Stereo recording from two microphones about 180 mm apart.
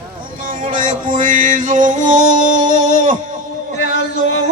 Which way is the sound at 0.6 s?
45° right (ahead or behind).